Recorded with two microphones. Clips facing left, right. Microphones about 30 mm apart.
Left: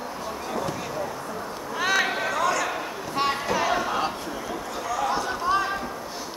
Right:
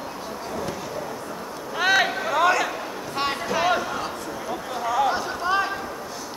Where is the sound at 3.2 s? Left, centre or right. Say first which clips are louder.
Left 1 dB; centre.